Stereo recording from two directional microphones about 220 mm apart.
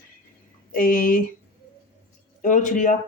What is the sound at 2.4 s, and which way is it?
Speech, 35° left (ahead or behind).